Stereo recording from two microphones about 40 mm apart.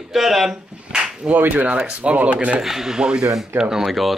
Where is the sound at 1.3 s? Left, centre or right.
Right.